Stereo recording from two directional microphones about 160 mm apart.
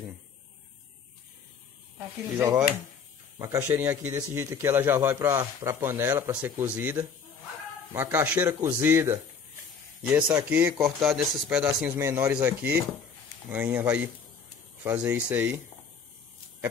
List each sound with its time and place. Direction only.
2.0 s a man's voice: 15° right (ahead or behind)